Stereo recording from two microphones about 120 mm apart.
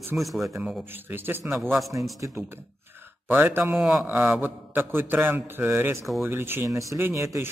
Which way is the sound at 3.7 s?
Centre (ahead or behind).